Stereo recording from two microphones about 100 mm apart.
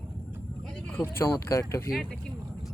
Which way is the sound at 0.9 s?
20° left (ahead or behind).